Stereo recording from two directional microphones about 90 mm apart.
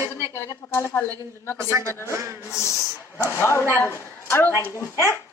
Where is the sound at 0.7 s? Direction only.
30° left (ahead or behind).